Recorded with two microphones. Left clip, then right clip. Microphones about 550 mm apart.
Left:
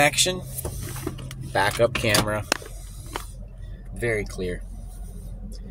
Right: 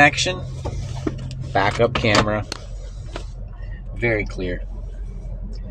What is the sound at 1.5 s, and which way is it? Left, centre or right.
Speech, left.